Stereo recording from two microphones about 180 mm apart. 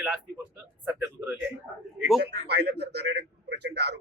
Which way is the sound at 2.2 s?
70° right (ahead or behind).